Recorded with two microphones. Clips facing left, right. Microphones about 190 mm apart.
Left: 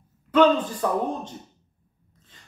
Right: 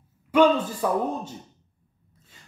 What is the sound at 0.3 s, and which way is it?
Speech, 10° right (ahead or behind).